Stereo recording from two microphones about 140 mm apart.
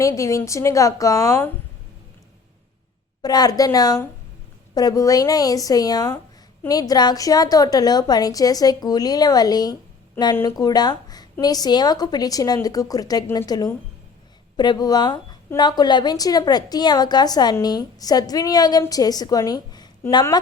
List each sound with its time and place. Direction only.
0.0 s a woman's voice: 20° left (ahead or behind)
3.2 s a woman's voice: 30° left (ahead or behind)